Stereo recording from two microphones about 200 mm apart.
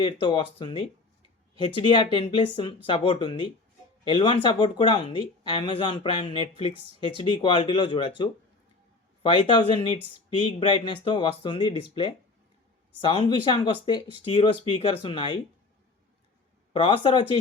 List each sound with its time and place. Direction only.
0.0 s speech: 25° left (ahead or behind)
9.2 s speech: 25° left (ahead or behind)
16.7 s speech: 25° left (ahead or behind)